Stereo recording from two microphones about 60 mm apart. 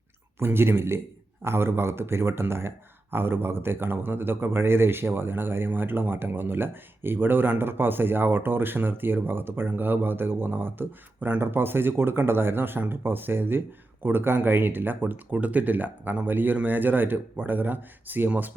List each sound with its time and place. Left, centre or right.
0.3 s speech: right